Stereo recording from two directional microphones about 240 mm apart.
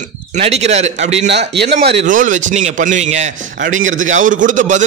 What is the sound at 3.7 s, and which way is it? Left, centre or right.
Speech, right.